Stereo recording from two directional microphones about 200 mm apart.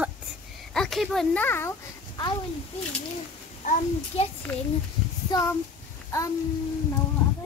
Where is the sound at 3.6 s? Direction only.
40° left (ahead or behind).